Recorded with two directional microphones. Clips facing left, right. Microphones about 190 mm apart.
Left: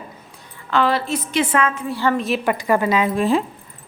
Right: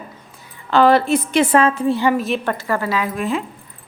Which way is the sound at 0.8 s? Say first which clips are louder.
Right 7 dB; 50° right (ahead or behind).